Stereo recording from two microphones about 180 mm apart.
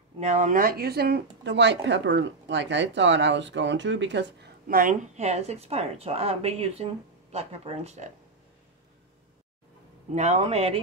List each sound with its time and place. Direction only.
0.2 s speech: 40° right (ahead or behind); by 4.3 s 85° right
4.6 s speech: 50° right (ahead or behind)
10.1 s speech: 40° right (ahead or behind)